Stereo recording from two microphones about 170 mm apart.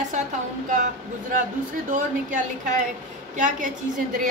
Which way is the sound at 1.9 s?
50° right (ahead or behind).